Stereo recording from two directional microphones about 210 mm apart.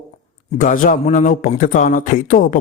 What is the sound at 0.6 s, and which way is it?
A man's voice, 40° left (ahead or behind).